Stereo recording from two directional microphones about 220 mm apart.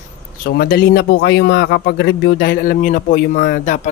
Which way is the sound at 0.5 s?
45° left (ahead or behind).